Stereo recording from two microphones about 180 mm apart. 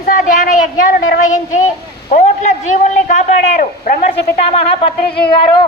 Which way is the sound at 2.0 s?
40° left (ahead or behind).